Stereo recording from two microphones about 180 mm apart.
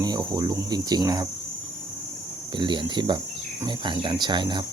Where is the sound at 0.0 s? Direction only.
20° right (ahead or behind).